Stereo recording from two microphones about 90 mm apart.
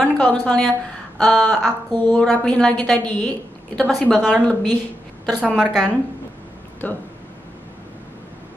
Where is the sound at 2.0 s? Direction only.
20° left (ahead or behind).